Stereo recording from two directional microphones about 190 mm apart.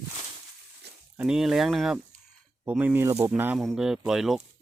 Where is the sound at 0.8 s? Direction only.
60° right (ahead or behind).